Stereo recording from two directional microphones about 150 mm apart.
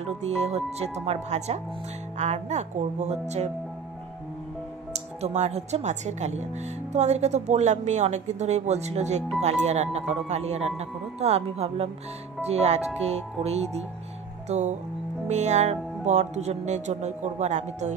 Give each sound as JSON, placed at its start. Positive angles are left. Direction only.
{"t": 0.2, "sound": "speech", "side_deg": -45}
{"t": 4.9, "sound": "speech", "side_deg": -45}